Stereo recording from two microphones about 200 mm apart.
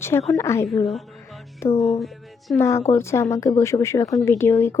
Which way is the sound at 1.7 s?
30° left (ahead or behind).